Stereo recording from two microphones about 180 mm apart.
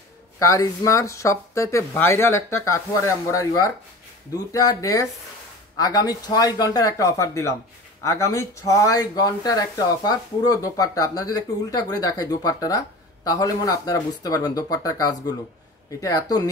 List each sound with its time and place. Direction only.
0.4 s speech: 15° left (ahead or behind)